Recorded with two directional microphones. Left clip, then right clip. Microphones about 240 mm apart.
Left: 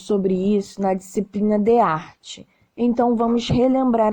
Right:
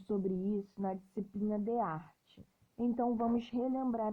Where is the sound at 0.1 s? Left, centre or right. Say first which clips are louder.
Left 17 dB; left.